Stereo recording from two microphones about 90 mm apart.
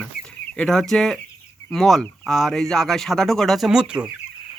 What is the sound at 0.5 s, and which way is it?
Speech, 5° left (ahead or behind).